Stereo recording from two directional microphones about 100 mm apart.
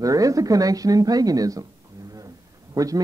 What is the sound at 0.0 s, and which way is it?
Speech, 35° right (ahead or behind).